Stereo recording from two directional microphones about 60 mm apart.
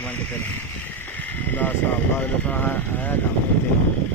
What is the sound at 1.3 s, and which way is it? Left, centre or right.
Speech, left.